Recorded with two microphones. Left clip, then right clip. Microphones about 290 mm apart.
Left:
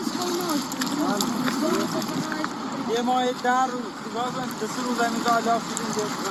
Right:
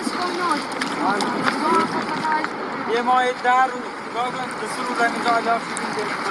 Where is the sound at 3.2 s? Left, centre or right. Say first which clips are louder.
Right 4 dB; right.